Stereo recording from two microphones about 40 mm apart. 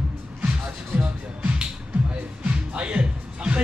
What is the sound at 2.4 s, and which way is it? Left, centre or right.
Music, right.